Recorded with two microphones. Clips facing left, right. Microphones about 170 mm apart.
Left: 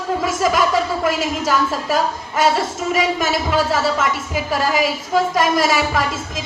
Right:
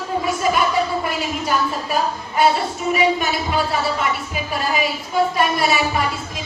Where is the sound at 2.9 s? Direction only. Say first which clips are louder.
Even; 90° left.